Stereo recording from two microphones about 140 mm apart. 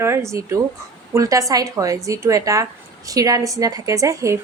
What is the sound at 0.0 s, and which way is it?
Speech, 20° right (ahead or behind).